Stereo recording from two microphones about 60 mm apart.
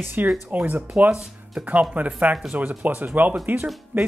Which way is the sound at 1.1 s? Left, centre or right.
Centre.